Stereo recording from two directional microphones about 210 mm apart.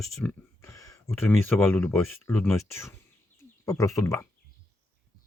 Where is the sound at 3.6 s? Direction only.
15° left (ahead or behind).